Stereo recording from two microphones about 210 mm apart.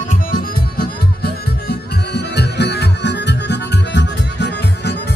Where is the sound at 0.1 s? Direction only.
45° left (ahead or behind).